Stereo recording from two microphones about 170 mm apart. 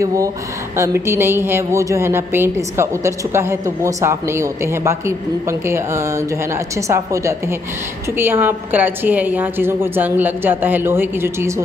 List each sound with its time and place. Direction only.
0.0 s a woman's voice: 20° right (ahead or behind)